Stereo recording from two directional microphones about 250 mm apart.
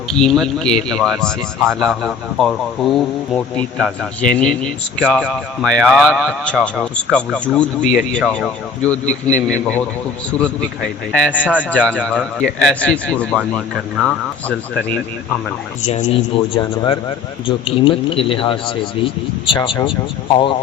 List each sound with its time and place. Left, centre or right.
0.1 s speech: centre
11.1 s speech: centre
15.9 s speech: left